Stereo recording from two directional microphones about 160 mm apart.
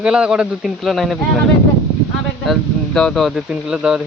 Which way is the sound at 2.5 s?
5° left (ahead or behind).